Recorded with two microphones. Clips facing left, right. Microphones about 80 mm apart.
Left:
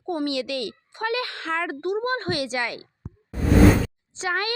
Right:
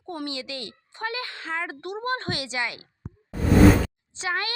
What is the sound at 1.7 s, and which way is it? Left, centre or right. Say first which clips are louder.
Speech: left 4 dB; left.